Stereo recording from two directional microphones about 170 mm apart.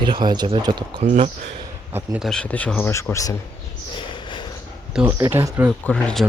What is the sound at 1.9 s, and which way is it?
Speech, 15° right (ahead or behind).